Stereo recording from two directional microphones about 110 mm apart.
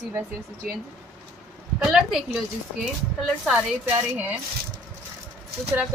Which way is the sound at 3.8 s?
20° right (ahead or behind).